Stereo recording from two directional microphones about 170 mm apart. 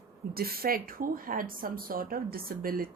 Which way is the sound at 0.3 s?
60° right (ahead or behind).